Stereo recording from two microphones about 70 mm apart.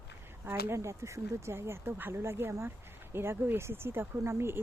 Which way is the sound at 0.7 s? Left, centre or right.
Right.